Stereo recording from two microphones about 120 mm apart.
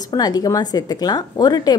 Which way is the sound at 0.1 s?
35° left (ahead or behind).